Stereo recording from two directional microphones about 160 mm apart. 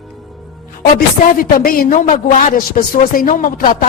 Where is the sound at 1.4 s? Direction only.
60° left (ahead or behind).